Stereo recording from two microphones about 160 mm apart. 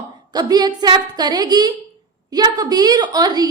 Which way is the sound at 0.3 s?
25° right (ahead or behind).